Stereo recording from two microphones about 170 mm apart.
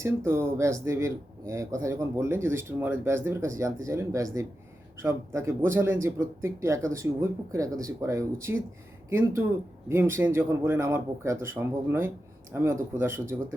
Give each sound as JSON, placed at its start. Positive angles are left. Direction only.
{"t": 0.0, "sound": "speech", "side_deg": -15}